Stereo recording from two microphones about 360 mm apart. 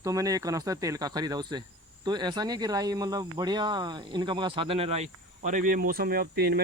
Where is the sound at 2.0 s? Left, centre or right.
Centre.